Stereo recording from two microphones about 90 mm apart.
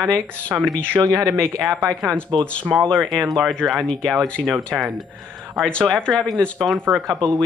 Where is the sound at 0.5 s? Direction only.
15° right (ahead or behind).